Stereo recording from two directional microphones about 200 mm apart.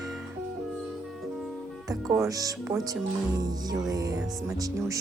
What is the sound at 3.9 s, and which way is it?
Speech, 20° right (ahead or behind).